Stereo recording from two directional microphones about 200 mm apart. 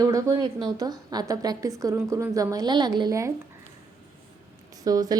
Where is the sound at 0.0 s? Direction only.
15° right (ahead or behind).